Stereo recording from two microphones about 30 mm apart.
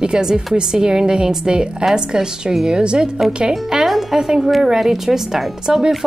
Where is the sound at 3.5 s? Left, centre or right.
Centre.